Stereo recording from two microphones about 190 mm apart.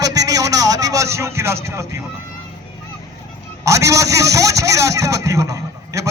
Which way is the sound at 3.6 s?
15° right (ahead or behind).